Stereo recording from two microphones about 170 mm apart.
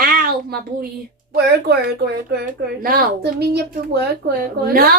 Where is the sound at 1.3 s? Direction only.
70° right (ahead or behind).